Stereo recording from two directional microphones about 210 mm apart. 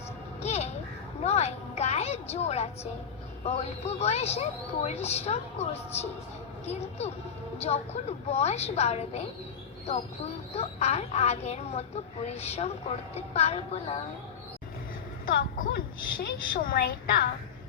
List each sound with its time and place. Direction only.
0.4 s a sound: 30° left (ahead or behind)
3.4 s speech: 30° left (ahead or behind)
8.3 s speech: 30° left (ahead or behind)
10.5 s a woman's voice: 30° left (ahead or behind)
15.3 s a woman's voice: 45° left (ahead or behind)